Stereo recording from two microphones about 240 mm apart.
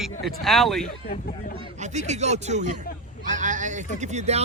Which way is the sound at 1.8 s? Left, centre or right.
Right.